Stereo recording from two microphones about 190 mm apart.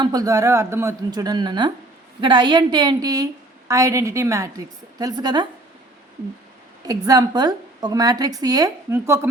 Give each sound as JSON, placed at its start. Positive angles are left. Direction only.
{"t": 0.0, "sound": "a woman's voice", "side_deg": -20}
{"t": 7.0, "sound": "a woman's voice", "side_deg": -20}